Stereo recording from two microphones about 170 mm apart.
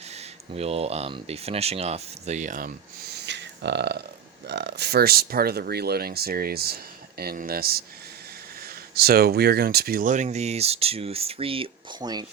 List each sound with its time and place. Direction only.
0.1 s speech: 40° right (ahead or behind)